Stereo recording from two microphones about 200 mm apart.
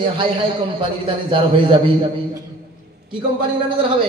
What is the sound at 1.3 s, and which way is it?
Speech, 25° right (ahead or behind).